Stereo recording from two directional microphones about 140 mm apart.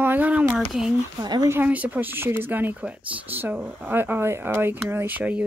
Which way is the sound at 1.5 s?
10° right (ahead or behind).